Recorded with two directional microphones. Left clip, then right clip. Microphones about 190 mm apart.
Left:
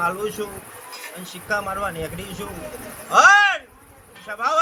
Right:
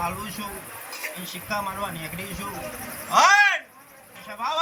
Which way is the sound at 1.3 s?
30° left (ahead or behind).